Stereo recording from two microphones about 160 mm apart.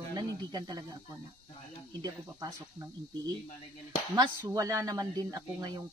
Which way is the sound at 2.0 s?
25° right (ahead or behind).